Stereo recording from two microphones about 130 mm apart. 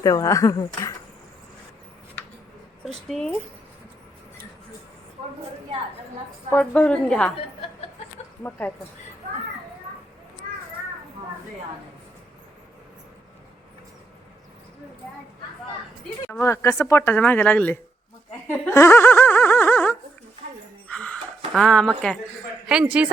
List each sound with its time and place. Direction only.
0.0 s speech: 25° left (ahead or behind)
2.9 s speech: 5° left (ahead or behind)
6.5 s speech: 10° left (ahead or behind)
8.4 s speech: 15° left (ahead or behind)
16.3 s speech: 20° left (ahead or behind)
18.7 s a sound: 20° left (ahead or behind); by 22.2 s 5° left (ahead or behind)
22.6 s speech: 5° right (ahead or behind)